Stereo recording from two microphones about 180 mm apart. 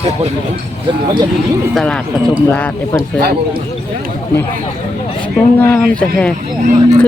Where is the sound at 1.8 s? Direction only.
5° left (ahead or behind).